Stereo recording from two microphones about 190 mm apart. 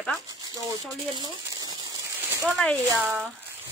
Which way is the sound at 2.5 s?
5° left (ahead or behind).